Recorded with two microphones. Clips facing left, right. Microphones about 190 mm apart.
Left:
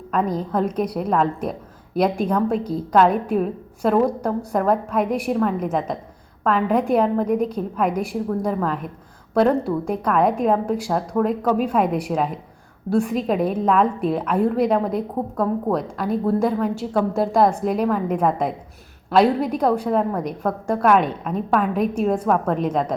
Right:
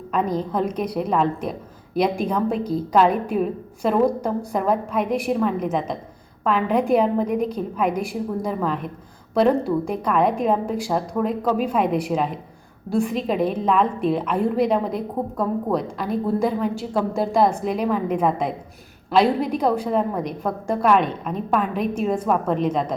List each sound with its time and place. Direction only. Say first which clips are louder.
0.1 s a woman's voice: left 1 dB; centre (ahead or behind)
10.0 s a woman's voice: left 3 dB; centre (ahead or behind)